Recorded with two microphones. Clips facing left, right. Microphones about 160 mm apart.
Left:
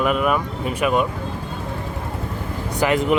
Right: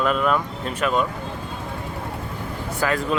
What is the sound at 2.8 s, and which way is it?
Speech, 20° left (ahead or behind).